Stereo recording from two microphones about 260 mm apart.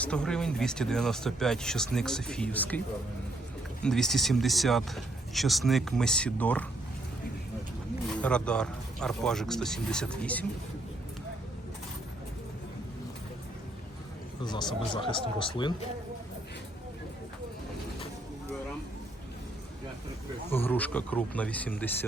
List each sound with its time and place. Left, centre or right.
0.0 s speech: centre
3.8 s speech: centre
8.1 s speech: centre
14.4 s speech: centre
20.5 s speech: centre